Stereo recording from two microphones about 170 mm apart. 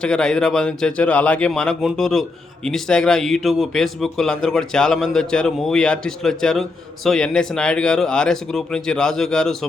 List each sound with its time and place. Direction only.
0.0 s speech: 5° left (ahead or behind)